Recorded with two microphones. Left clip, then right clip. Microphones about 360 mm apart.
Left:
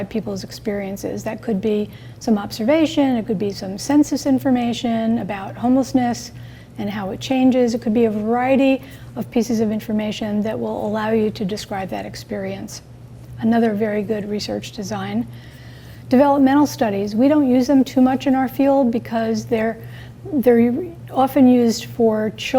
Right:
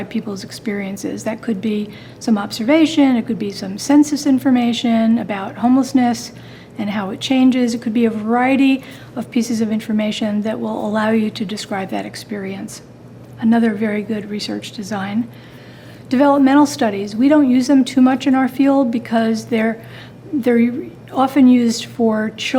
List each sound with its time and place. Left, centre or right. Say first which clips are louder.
0.0 s a woman's voice: even; left
16.0 s a woman's voice: right 1 dB; left